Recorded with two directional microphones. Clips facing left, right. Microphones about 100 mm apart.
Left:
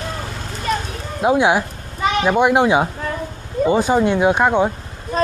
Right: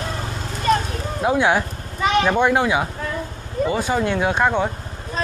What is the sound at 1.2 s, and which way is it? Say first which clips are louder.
A man's voice: left 3 dB; 15° left (ahead or behind).